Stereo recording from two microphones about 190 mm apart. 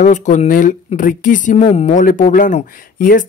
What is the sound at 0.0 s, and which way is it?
Speech, 40° left (ahead or behind).